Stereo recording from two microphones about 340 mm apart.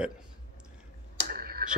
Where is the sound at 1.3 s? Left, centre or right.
Right.